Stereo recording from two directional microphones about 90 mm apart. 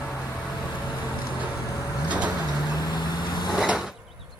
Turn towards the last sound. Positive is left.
turn(degrees=-5)  # may be behind; listen again after turning